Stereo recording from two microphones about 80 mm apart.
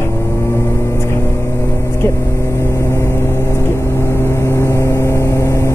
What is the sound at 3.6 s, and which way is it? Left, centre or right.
Vehicle, left.